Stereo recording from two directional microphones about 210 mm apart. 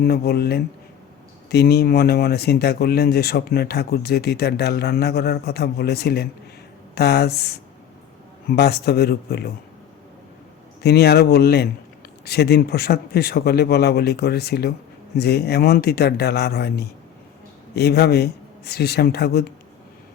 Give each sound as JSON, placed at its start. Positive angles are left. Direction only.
{"t": 0.0, "sound": "speech", "side_deg": 45}
{"t": 10.8, "sound": "speech", "side_deg": 50}